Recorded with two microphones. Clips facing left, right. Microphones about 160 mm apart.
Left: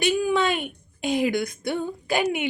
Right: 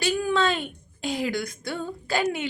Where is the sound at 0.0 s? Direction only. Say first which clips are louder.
Left 2 dB; 15° left (ahead or behind).